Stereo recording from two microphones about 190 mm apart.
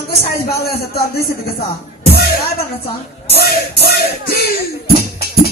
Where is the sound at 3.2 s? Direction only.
55° left (ahead or behind).